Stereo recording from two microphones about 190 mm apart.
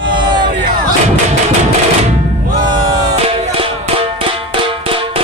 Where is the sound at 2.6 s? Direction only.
20° right (ahead or behind).